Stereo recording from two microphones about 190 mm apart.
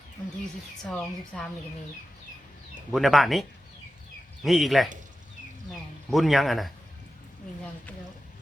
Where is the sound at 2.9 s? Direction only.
Centre (ahead or behind).